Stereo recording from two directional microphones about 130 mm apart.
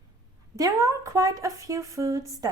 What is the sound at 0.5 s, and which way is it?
Speech, 25° right (ahead or behind).